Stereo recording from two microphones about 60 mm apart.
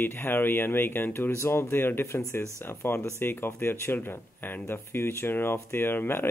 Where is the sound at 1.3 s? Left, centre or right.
Left.